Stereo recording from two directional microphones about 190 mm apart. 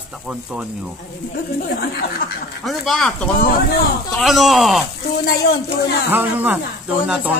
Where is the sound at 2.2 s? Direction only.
45° left (ahead or behind).